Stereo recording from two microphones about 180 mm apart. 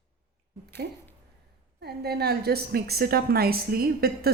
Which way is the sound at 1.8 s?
65° right (ahead or behind).